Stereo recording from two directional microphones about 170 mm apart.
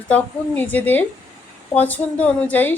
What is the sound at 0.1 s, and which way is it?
A woman's voice, 10° left (ahead or behind).